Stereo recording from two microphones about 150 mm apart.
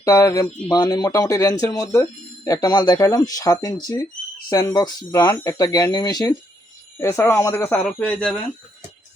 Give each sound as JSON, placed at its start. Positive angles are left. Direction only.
{"t": 0.0, "sound": "speech", "side_deg": 20}